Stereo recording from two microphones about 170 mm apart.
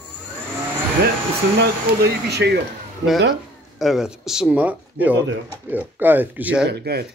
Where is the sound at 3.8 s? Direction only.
Centre (ahead or behind).